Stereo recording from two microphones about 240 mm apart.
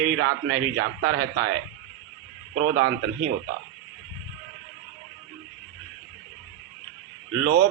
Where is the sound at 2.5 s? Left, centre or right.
Right.